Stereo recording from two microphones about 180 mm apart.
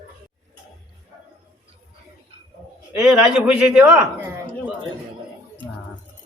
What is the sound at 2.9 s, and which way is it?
Speech, 5° right (ahead or behind).